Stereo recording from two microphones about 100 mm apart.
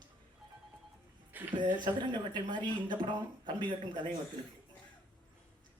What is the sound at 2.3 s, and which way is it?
Speech, 50° right (ahead or behind).